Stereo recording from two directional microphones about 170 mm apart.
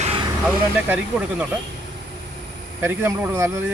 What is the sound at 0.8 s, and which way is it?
Speech, 10° right (ahead or behind).